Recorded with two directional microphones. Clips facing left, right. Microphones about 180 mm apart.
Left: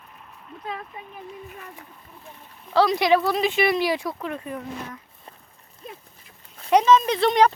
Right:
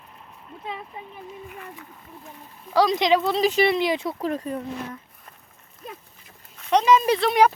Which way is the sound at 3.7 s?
20° right (ahead or behind).